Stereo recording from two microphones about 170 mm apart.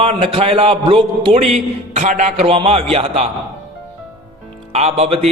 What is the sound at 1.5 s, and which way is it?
A man's voice, 45° right (ahead or behind).